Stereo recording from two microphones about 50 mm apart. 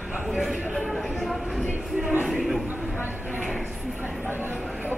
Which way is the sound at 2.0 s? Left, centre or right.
Right.